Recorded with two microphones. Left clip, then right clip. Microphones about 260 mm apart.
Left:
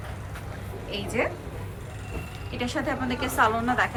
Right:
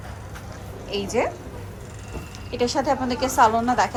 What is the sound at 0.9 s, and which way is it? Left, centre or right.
Speech, centre.